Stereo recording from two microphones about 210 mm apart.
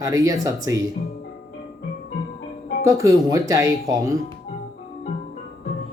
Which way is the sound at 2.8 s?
15° right (ahead or behind).